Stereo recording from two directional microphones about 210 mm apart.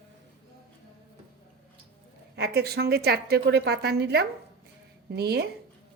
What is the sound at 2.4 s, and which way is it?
A woman's voice, 50° right (ahead or behind).